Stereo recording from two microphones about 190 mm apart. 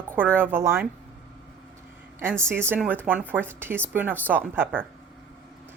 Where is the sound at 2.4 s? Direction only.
10° right (ahead or behind).